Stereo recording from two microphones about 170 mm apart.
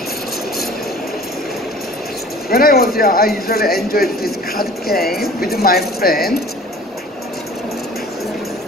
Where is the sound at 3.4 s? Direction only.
65° left (ahead or behind).